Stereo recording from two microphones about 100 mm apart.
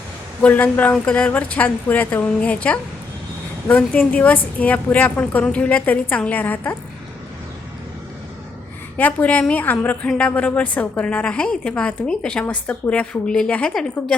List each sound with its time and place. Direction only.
0.4 s a woman's voice: 15° left (ahead or behind)
9.0 s a woman's voice: 15° left (ahead or behind)